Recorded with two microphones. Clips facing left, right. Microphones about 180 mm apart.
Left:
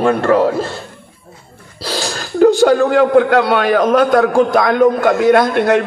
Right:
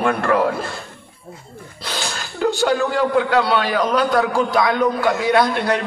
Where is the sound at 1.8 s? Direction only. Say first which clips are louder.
Left 6 dB; 35° left (ahead or behind).